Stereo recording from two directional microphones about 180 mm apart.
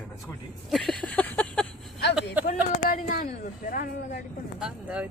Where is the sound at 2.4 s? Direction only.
50° left (ahead or behind).